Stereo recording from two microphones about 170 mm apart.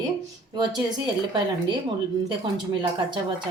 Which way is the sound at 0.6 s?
25° right (ahead or behind).